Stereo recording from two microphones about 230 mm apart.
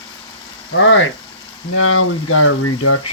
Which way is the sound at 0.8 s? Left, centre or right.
Left.